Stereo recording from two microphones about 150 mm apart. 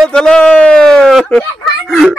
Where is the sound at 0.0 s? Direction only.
5° left (ahead or behind).